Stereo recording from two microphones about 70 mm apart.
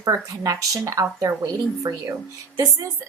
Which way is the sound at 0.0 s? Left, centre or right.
Right.